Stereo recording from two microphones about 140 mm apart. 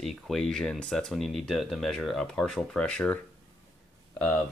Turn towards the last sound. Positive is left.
turn(degrees=5)  # may be behind; listen again after turning